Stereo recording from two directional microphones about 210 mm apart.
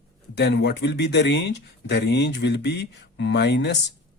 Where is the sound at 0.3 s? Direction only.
50° left (ahead or behind).